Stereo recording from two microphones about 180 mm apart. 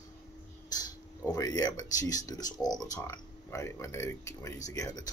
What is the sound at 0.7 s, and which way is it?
Speech, 20° left (ahead or behind).